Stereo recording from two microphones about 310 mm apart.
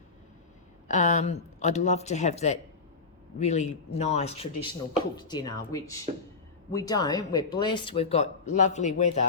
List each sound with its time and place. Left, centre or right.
0.9 s speech: left